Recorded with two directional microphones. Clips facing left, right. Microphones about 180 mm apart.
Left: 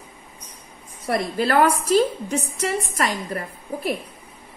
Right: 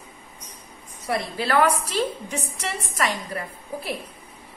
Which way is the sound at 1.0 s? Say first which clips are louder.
Left 4 dB; 45° left (ahead or behind).